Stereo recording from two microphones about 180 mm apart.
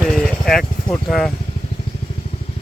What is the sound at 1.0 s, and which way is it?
Speech, centre (ahead or behind).